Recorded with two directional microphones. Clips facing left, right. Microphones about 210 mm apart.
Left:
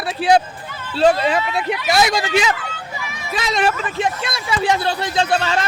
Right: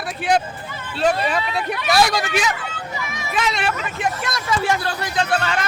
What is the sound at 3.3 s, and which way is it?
Speech, 40° left (ahead or behind).